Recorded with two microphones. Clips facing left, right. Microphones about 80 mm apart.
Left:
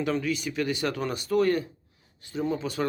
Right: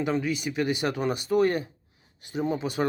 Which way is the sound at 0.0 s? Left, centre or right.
Centre.